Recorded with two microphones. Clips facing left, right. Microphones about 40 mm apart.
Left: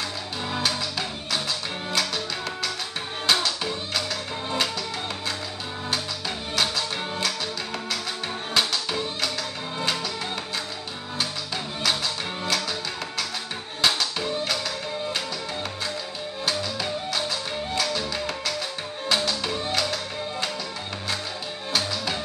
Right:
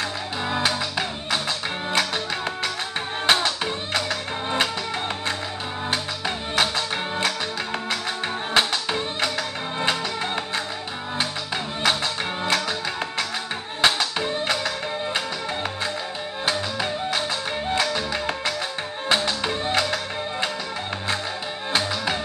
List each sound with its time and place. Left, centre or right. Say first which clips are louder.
0.5 s music: right 3 dB; right
5.9 s music: right 2 dB; right
8.5 s music: right 3 dB; right
13.7 s music: right 3 dB; right
16.4 s music: right 3 dB; right
21.7 s music: right 3 dB; right